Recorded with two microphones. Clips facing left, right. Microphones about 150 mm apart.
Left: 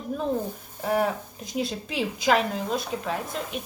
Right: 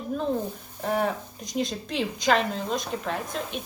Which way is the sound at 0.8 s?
5° left (ahead or behind).